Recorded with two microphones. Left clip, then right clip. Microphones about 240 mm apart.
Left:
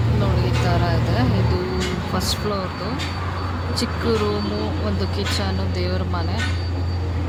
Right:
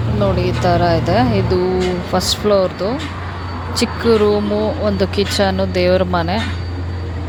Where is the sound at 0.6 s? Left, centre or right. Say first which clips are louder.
Right 11 dB; right.